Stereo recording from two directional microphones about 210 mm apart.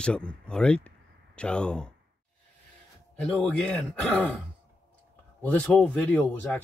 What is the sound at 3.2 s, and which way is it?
Speech, 5° left (ahead or behind).